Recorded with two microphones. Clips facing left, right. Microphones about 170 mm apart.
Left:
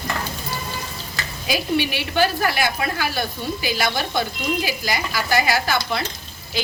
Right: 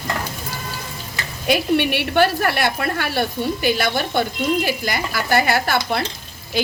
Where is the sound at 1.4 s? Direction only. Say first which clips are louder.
Right 4 dB; 60° right (ahead or behind).